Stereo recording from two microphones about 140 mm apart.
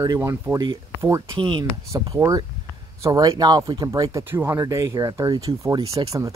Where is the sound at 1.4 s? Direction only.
35° right (ahead or behind).